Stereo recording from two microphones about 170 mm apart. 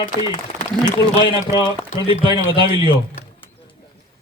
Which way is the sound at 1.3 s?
20° right (ahead or behind).